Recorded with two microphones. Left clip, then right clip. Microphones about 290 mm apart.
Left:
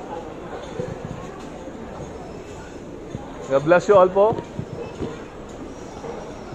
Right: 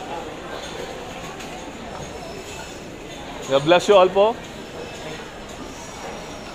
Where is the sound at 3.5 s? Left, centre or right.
Right.